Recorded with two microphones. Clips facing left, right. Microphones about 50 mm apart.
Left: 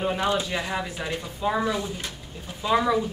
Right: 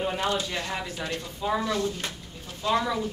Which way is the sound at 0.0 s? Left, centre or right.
Centre.